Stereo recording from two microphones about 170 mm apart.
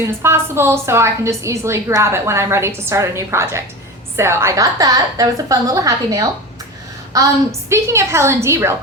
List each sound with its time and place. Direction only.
0.0 s a woman's voice: 15° right (ahead or behind)